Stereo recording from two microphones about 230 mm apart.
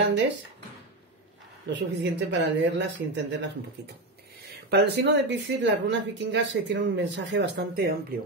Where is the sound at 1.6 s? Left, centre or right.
Right.